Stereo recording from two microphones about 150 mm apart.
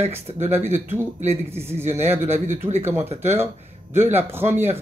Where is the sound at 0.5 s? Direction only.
15° right (ahead or behind).